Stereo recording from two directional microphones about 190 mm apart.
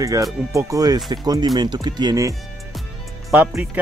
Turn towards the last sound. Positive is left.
turn(degrees=-10)  # may be behind; listen again after turning